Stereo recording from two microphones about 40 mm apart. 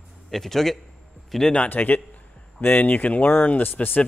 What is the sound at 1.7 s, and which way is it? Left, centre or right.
Speech, left.